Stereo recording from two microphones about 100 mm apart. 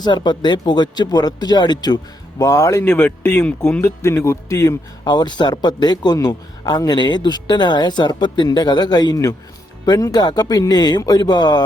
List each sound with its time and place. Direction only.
0.0 s speech: 45° left (ahead or behind)
2.4 s speech: 30° left (ahead or behind)
5.0 s speech: 45° left (ahead or behind)